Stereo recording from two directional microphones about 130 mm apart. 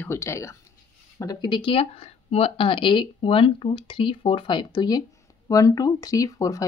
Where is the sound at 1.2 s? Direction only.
35° left (ahead or behind).